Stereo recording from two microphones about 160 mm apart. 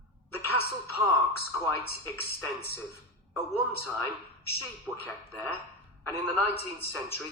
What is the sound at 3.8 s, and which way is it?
A man's voice, 15° left (ahead or behind).